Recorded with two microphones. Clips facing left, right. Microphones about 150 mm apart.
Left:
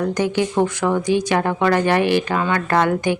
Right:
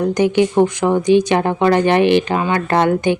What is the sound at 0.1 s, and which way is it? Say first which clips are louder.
Speech: right 5 dB; 20° right (ahead or behind).